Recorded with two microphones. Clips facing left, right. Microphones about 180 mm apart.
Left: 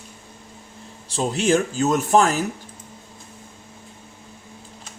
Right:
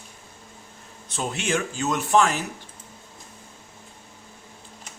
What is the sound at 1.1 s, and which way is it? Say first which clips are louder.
Speech: left 7 dB; 35° left (ahead or behind).